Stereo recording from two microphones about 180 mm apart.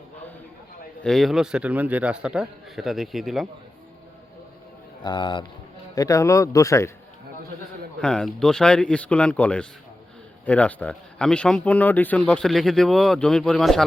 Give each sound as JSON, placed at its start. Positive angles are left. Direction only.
{"t": 1.0, "sound": "speech", "side_deg": 0}
{"t": 5.0, "sound": "a man's voice", "side_deg": 25}
{"t": 8.0, "sound": "speech", "side_deg": 5}